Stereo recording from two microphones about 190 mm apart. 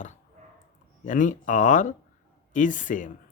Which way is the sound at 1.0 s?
40° left (ahead or behind).